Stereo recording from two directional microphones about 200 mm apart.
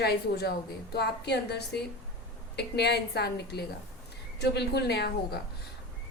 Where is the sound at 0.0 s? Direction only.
55° left (ahead or behind).